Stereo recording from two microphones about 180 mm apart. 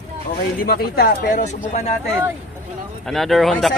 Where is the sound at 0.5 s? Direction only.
55° left (ahead or behind).